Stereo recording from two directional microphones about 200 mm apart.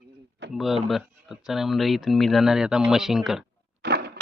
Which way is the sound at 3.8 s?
55° right (ahead or behind).